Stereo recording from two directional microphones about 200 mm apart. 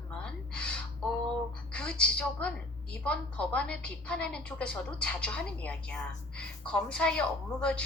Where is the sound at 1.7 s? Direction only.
5° left (ahead or behind).